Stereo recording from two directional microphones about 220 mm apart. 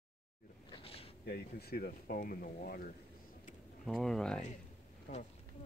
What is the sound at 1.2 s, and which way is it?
Speech, 45° left (ahead or behind).